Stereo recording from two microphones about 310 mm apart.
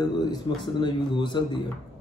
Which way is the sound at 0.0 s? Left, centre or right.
Centre.